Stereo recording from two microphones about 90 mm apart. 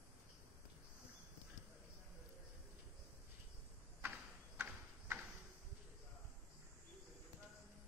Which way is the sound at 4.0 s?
20° right (ahead or behind).